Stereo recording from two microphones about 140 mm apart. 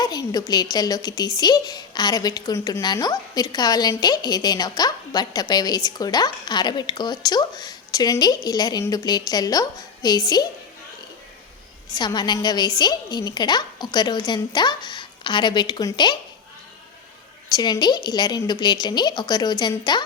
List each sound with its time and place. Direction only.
0.0 s a woman's voice: 25° left (ahead or behind)
11.9 s a woman's voice: 30° left (ahead or behind)
17.5 s a woman's voice: 30° left (ahead or behind)